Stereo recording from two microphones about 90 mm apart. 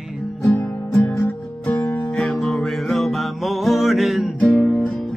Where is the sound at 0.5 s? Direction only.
20° left (ahead or behind).